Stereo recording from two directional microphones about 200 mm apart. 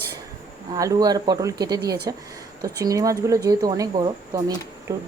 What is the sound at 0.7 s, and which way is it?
Speech, 20° right (ahead or behind).